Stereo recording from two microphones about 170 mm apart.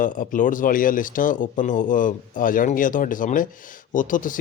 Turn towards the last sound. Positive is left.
turn(degrees=50)  # may be behind; listen again after turning